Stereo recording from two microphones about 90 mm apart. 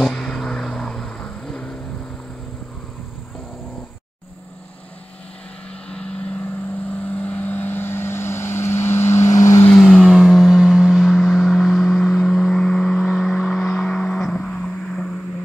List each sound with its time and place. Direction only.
0.0 s vehicle: 5° left (ahead or behind)
7.0 s vehicle: 15° left (ahead or behind); by 9.7 s 35° left (ahead or behind)
9.8 s vehicle: centre (ahead or behind)